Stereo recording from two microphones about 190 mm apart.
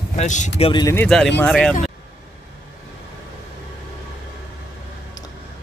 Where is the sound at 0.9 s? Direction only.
5° left (ahead or behind).